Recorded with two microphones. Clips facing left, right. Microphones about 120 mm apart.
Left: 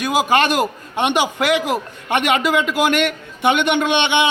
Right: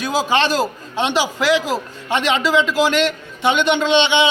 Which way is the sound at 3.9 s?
55° left (ahead or behind).